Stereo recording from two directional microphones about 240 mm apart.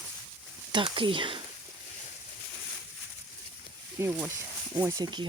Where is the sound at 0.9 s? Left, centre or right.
Right.